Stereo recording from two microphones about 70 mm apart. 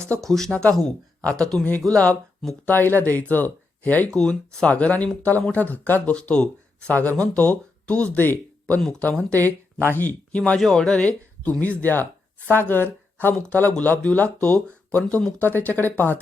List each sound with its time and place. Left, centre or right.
0.3 s speech: centre
2.6 s speech: left
4.1 s speech: centre; by 16.2 s left